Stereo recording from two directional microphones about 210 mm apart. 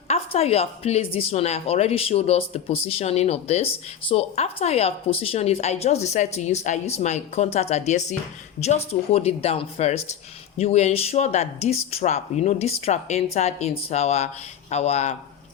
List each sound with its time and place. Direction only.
0.1 s a woman's voice: 30° left (ahead or behind)